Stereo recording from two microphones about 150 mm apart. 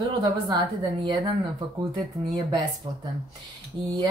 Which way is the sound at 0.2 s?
30° right (ahead or behind).